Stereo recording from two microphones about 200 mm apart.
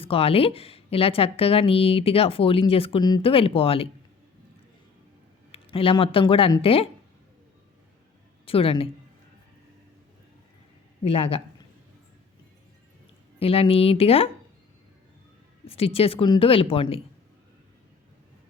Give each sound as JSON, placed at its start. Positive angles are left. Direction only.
{"t": 0.0, "sound": "a woman's voice", "side_deg": 30}
{"t": 5.5, "sound": "speech", "side_deg": 30}
{"t": 8.4, "sound": "a woman's voice", "side_deg": 30}
{"t": 11.0, "sound": "a woman's voice", "side_deg": 30}
{"t": 13.4, "sound": "a woman's voice", "side_deg": 30}
{"t": 15.6, "sound": "a woman's voice", "side_deg": 30}